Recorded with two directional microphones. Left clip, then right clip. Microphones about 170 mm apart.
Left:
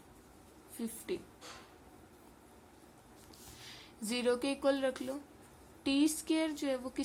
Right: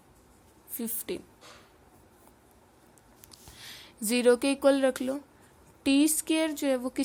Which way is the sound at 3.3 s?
70° right (ahead or behind).